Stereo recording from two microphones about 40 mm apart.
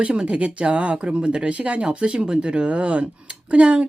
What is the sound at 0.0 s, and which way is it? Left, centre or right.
Speech, right.